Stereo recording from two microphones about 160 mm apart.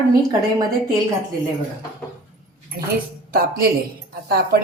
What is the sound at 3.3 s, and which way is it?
Speech, 70° right (ahead or behind).